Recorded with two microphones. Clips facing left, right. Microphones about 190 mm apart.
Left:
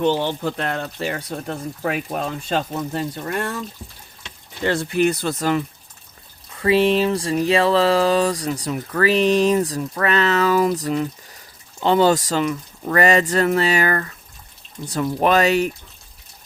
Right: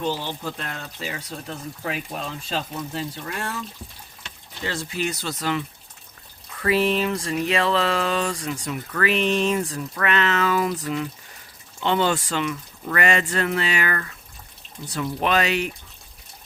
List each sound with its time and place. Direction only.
0.0 s speech: 70° left (ahead or behind); by 3.4 s 50° left (ahead or behind)
4.6 s speech: 60° left (ahead or behind)
6.6 s speech: 30° left (ahead or behind)